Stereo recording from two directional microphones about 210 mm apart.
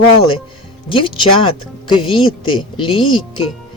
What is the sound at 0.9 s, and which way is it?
Speech, 25° left (ahead or behind).